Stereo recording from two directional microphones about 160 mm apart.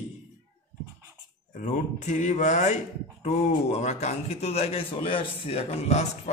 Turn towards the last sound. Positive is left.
turn(degrees=45)  # may be behind; listen again after turning